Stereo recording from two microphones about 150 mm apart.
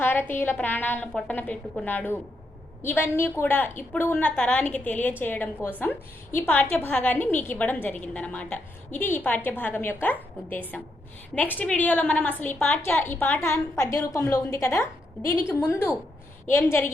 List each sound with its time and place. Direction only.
0.0 s a woman's voice: 15° left (ahead or behind)